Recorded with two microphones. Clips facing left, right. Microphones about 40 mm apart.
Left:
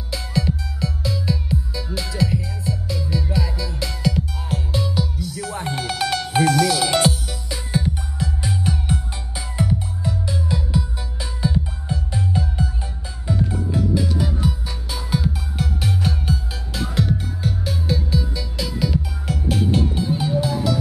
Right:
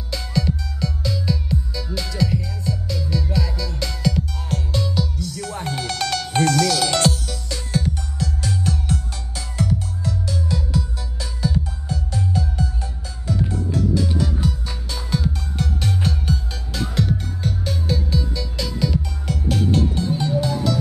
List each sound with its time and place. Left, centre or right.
0.1 s music: centre